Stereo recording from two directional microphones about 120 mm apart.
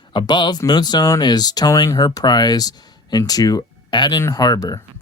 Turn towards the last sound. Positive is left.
turn(degrees=30)  # may be behind; listen again after turning